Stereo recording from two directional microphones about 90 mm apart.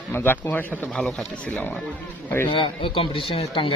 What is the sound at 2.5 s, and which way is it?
Speech, 75° left (ahead or behind).